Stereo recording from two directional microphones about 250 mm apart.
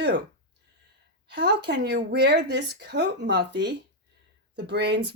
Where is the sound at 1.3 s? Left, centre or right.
Right.